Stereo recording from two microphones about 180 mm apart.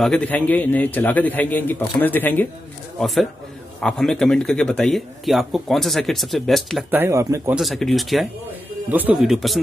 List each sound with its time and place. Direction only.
0.0 s a man's voice: 5° left (ahead or behind)
3.8 s a man's voice: 5° left (ahead or behind)
6.9 s speech: 15° right (ahead or behind)
7.5 s a man's voice: centre (ahead or behind)